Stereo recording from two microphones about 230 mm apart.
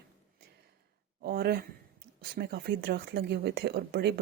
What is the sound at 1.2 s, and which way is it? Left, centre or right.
Speech, right.